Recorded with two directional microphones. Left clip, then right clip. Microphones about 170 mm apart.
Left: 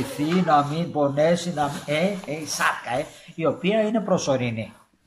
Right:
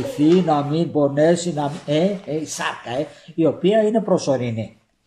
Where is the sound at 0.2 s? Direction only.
15° right (ahead or behind).